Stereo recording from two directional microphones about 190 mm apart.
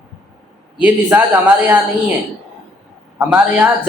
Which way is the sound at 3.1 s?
10° right (ahead or behind).